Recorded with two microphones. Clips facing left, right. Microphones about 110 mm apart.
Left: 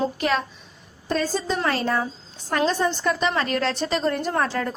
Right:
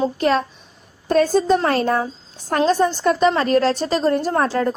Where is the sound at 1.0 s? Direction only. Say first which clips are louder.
Right 9 dB; 55° right (ahead or behind); by 4.7 s 35° right (ahead or behind).